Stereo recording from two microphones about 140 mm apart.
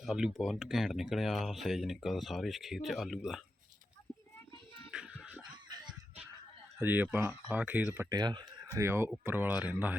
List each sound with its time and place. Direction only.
0.0 s speech: 5° right (ahead or behind)
4.9 s music: 5° right (ahead or behind)
5.6 s a sound: 30° right (ahead or behind)
6.7 s speech: 15° right (ahead or behind)
8.1 s speech: 30° right (ahead or behind)
8.6 s speech: 20° right (ahead or behind)